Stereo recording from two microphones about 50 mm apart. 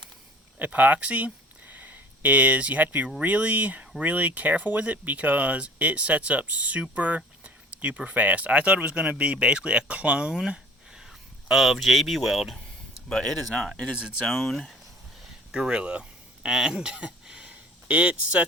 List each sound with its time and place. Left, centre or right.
0.6 s speech: right; by 14.8 s centre
15.5 s speech: centre